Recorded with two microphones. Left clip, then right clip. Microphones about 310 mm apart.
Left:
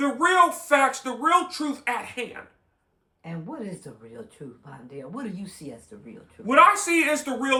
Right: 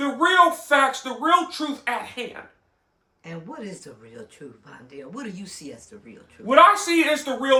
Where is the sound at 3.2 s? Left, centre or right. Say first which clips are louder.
Even; centre.